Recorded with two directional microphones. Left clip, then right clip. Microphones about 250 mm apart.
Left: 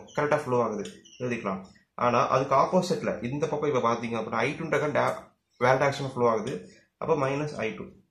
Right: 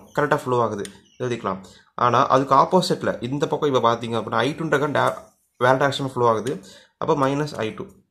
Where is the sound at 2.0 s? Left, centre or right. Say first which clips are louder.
Right 6 dB; right.